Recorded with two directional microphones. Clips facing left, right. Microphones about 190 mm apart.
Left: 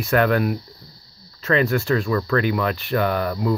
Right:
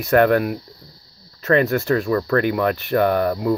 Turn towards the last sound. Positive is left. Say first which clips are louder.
# right 3 dB
turn(degrees=-40)  # may be behind; listen again after turning